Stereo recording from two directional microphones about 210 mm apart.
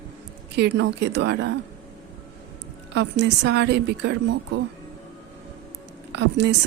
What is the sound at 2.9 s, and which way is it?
Speech, 55° right (ahead or behind).